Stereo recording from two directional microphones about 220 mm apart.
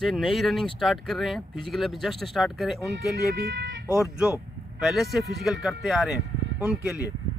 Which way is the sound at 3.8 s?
5° right (ahead or behind).